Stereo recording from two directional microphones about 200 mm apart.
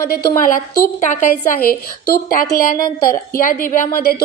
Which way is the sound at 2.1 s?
45° left (ahead or behind).